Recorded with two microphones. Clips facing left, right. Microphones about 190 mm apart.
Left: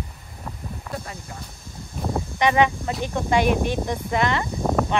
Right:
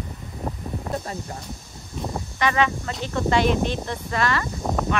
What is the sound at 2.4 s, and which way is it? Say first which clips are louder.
Speech: left 3 dB; 15° left (ahead or behind).